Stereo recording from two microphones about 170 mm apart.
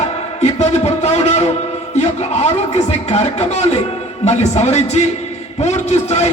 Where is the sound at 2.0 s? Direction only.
40° left (ahead or behind).